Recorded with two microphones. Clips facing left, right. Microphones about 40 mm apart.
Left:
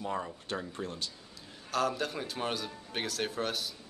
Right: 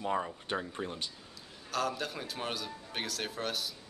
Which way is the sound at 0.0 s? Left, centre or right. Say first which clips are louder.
Right 2 dB; centre.